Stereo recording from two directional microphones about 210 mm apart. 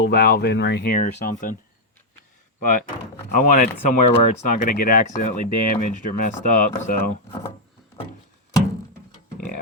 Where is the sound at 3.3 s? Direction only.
40° left (ahead or behind).